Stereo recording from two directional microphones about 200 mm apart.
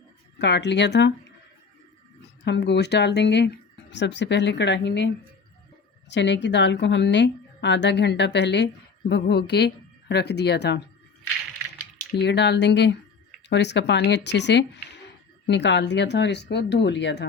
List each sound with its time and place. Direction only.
0.3 s a woman's voice: 60° left (ahead or behind)
2.4 s a woman's voice: 60° left (ahead or behind)
6.1 s a woman's voice: 60° left (ahead or behind)
12.1 s a woman's voice: 60° left (ahead or behind)